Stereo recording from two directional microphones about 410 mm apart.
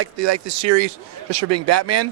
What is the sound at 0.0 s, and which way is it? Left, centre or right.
Speech, right.